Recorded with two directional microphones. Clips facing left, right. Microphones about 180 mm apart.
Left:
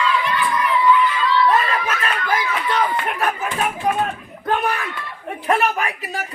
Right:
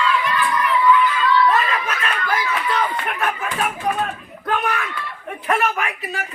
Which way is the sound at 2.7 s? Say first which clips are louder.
Left 2 dB; 25° left (ahead or behind).